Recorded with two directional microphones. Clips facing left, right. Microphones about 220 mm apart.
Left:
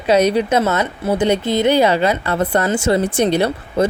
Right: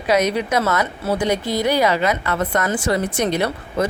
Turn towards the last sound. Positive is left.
turn(degrees=30)  # may be behind; listen again after turning